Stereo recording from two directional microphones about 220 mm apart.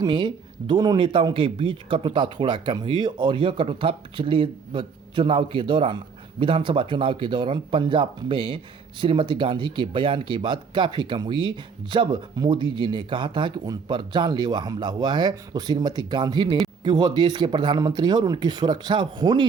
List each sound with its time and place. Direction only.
0.0 s speech: 20° right (ahead or behind)